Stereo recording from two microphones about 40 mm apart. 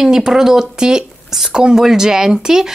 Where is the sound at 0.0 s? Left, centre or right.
Centre.